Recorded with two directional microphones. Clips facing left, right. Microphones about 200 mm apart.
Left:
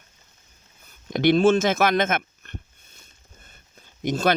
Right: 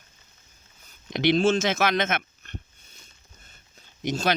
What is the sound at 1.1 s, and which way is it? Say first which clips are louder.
Speech: left 4 dB; 50° left (ahead or behind).